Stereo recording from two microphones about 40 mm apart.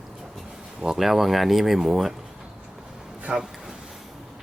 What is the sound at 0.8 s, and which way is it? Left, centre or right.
Speech, centre.